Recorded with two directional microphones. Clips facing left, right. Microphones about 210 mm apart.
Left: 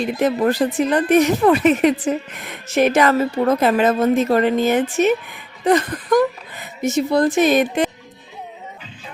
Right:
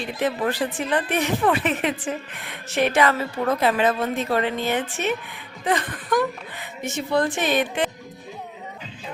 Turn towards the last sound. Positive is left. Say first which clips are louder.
# left 7 dB
turn(degrees=40)  # may be behind; listen again after turning